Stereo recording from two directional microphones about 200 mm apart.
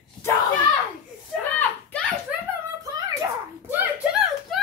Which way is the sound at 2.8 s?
15° right (ahead or behind).